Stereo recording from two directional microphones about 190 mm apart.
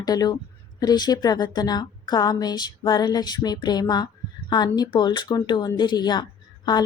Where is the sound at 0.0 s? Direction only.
20° left (ahead or behind).